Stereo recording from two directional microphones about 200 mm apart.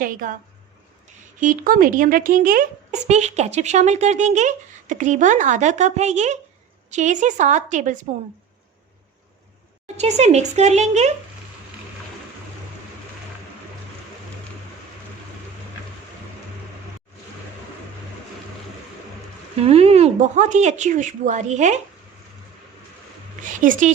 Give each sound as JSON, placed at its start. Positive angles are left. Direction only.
{"t": 0.0, "sound": "speech", "side_deg": -45}
{"t": 1.4, "sound": "speech", "side_deg": -40}
{"t": 3.1, "sound": "a woman's voice", "side_deg": -35}
{"t": 9.8, "sound": "a woman's voice", "side_deg": -35}
{"t": 19.5, "sound": "a woman's voice", "side_deg": -30}
{"t": 23.4, "sound": "a woman's voice", "side_deg": -40}